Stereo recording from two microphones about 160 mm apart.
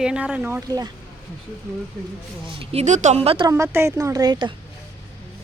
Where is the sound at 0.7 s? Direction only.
25° right (ahead or behind).